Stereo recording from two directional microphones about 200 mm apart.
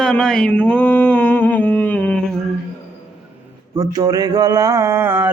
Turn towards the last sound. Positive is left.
turn(degrees=-10)  # may be behind; listen again after turning